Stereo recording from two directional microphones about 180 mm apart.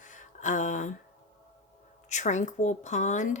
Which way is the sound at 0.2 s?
45° left (ahead or behind).